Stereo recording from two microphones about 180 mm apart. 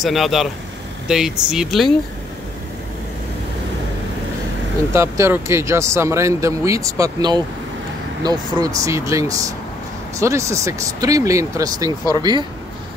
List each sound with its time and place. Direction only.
0.0 s speech: centre (ahead or behind)
4.9 s speech: 15° right (ahead or behind)